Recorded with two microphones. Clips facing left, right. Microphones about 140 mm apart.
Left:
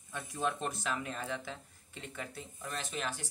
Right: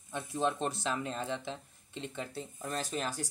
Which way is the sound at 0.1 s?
25° right (ahead or behind).